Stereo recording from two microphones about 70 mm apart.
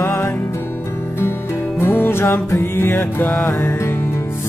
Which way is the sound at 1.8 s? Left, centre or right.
Left.